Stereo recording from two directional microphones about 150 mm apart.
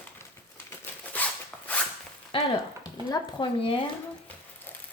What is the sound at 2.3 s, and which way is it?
Frying, 35° left (ahead or behind).